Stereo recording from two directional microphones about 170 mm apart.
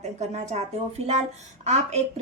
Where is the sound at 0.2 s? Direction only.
40° right (ahead or behind).